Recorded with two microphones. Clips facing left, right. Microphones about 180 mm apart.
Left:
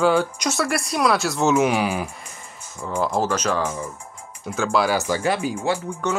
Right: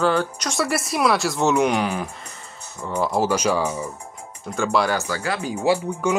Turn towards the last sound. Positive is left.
turn(degrees=-10)  # may be behind; listen again after turning